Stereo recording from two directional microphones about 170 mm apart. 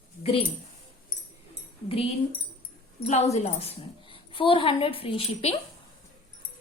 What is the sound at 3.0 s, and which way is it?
A woman's voice, 40° left (ahead or behind).